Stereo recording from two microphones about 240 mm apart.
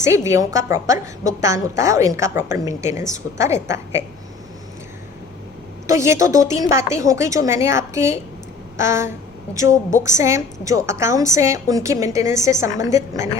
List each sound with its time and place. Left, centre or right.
0.0 s a woman's voice: centre
5.9 s a woman's voice: centre
9.6 s a woman's voice: left
10.0 s a woman's voice: centre